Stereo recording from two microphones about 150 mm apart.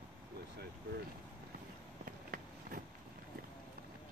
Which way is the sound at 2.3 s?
75° right (ahead or behind).